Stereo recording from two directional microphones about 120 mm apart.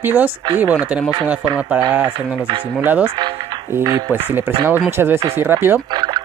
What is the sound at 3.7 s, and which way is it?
Speech, 20° right (ahead or behind).